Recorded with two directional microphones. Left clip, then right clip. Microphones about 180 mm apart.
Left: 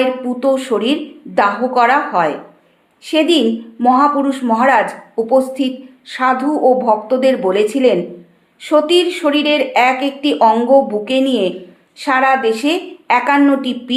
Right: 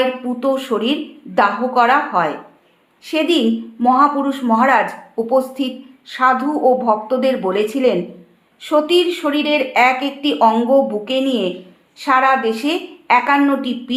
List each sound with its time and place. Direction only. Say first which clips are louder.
0.0 s speech: left 2 dB; 15° right (ahead or behind)